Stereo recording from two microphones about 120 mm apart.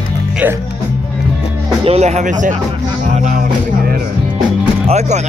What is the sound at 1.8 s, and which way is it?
Speech, 60° right (ahead or behind).